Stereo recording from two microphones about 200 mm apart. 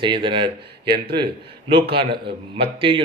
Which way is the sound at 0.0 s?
25° right (ahead or behind).